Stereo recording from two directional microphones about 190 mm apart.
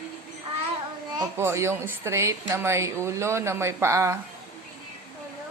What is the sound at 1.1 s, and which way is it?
A child's voice, 15° right (ahead or behind).